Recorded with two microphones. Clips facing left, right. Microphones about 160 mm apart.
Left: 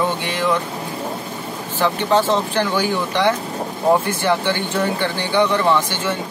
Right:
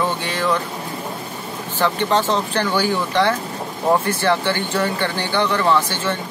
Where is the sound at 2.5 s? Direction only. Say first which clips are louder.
Even; 15° left (ahead or behind).